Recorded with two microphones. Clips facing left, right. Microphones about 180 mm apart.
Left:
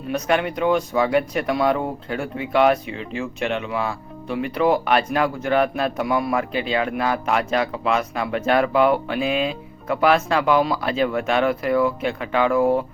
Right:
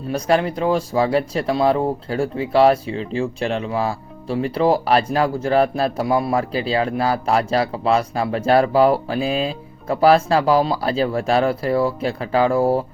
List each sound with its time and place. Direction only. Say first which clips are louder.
0.1 s speech: right 3 dB; 35° right (ahead or behind)